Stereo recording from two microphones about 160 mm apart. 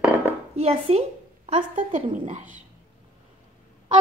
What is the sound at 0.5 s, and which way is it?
A woman's voice, 40° right (ahead or behind).